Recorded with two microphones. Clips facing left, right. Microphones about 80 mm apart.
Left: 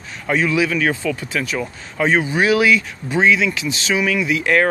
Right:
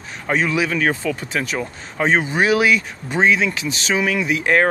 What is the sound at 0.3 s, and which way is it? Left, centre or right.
Speech, right.